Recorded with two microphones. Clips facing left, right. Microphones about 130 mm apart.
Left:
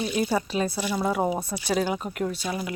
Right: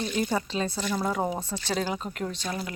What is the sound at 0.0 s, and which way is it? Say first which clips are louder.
Speech: left 2 dB; 10° left (ahead or behind).